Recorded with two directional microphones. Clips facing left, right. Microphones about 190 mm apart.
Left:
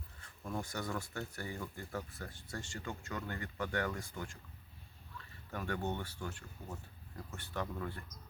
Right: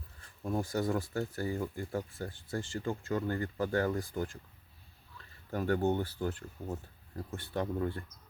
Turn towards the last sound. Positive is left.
turn(degrees=-30)  # may be behind; listen again after turning